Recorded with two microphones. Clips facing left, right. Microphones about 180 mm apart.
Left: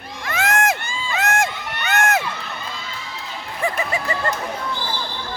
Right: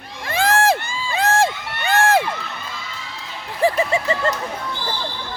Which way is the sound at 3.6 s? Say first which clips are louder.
Right 6 dB; 30° right (ahead or behind).